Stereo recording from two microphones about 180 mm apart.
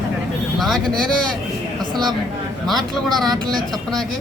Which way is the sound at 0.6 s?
Centre (ahead or behind).